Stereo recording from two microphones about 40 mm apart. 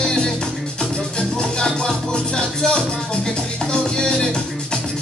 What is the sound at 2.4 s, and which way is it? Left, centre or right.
Music, left.